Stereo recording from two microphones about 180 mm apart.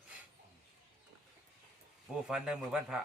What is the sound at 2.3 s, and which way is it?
Speech, 5° right (ahead or behind).